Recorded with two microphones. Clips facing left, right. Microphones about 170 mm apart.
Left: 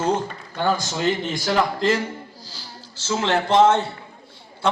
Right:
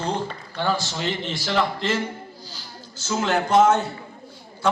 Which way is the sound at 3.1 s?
30° left (ahead or behind).